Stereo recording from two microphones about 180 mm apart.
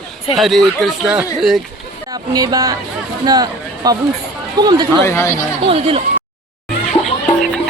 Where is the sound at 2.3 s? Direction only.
20° right (ahead or behind).